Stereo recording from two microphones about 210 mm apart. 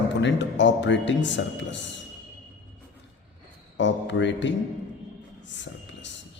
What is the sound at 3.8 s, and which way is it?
Speech, 60° left (ahead or behind).